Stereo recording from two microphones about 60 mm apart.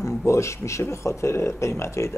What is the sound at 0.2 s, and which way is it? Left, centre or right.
Speech, left.